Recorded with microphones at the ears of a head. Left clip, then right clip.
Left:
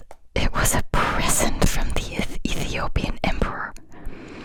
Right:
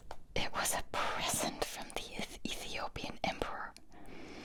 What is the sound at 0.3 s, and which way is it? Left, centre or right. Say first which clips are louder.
Whispering: left 12 dB; left.